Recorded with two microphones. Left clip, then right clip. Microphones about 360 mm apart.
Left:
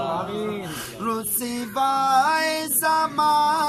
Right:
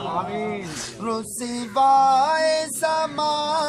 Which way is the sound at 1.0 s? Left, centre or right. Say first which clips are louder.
Left 1 dB; centre.